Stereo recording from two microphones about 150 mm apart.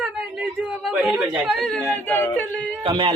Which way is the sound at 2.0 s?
15° left (ahead or behind).